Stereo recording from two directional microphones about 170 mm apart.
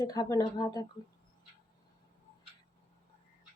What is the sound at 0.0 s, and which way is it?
Speech, 20° left (ahead or behind).